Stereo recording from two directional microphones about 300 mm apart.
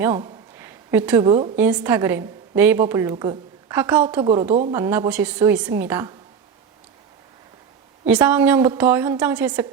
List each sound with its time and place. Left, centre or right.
0.0 s a woman's voice: centre
4.2 s a woman's voice: centre
8.0 s a woman's voice: centre